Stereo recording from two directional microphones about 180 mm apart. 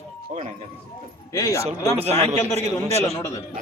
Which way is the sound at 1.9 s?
35° right (ahead or behind).